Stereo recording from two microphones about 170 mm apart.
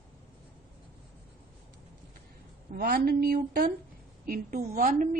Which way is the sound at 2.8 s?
65° right (ahead or behind).